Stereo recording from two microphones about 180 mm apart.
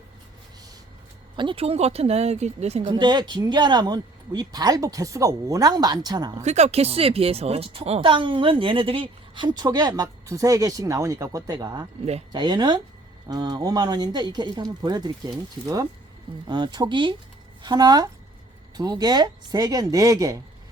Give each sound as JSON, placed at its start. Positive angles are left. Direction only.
{"t": 1.4, "sound": "speech", "side_deg": -30}
{"t": 2.9, "sound": "speech", "side_deg": -25}
{"t": 6.4, "sound": "speech", "side_deg": -40}